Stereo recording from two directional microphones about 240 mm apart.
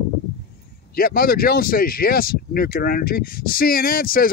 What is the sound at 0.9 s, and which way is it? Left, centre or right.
Speech, left.